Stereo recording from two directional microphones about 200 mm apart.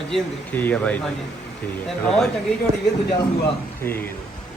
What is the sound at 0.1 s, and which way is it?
Speech, 10° left (ahead or behind).